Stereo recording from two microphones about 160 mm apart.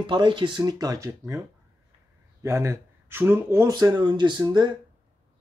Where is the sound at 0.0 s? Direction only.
30° right (ahead or behind).